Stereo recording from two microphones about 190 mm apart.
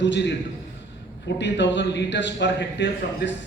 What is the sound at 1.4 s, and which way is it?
A man's voice, 70° left (ahead or behind).